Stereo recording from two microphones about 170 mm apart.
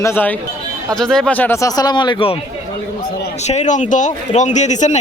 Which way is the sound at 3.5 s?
45° left (ahead or behind).